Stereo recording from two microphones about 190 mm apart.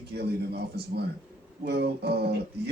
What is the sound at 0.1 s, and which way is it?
Speech, 60° right (ahead or behind).